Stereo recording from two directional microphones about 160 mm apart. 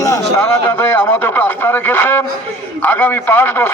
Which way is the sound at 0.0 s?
15° left (ahead or behind).